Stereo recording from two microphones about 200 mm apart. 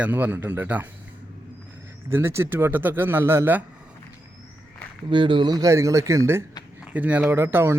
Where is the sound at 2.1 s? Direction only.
10° right (ahead or behind).